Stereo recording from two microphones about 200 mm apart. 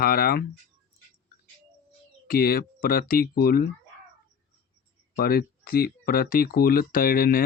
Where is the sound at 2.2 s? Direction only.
50° left (ahead or behind).